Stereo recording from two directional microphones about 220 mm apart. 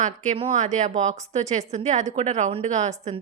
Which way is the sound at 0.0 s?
35° right (ahead or behind).